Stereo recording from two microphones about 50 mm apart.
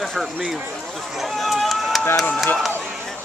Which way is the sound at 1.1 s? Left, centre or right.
Centre.